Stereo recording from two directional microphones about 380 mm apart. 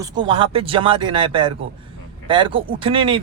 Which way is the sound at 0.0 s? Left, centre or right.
Centre.